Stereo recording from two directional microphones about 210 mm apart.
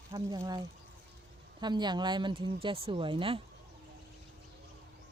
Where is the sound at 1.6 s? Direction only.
20° right (ahead or behind).